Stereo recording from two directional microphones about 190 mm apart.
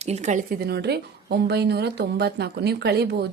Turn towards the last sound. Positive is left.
turn(degrees=-60)  # may be behind; listen again after turning